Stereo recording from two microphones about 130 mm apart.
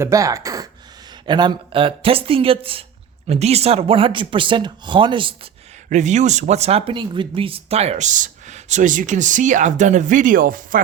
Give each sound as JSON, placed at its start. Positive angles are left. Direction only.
{"t": 0.0, "sound": "speech", "side_deg": -25}
{"t": 5.9, "sound": "speech", "side_deg": -65}